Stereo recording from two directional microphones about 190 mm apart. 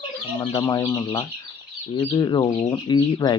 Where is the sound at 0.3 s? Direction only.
20° left (ahead or behind).